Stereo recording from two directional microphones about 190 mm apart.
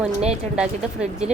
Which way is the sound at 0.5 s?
5° right (ahead or behind).